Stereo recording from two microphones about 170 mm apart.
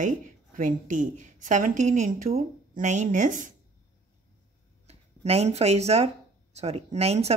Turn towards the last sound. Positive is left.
turn(degrees=-40)  # may be behind; listen again after turning